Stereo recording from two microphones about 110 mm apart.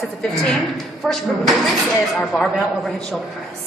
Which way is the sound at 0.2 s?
Centre (ahead or behind).